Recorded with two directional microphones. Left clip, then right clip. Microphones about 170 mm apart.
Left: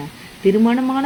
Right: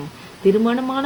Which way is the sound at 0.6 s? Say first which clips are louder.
Left 3 dB; 30° left (ahead or behind).